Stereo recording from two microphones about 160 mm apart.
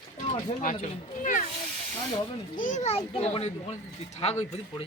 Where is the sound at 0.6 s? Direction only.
55° left (ahead or behind).